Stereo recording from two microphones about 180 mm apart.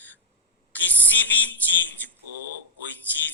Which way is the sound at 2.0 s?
10° left (ahead or behind).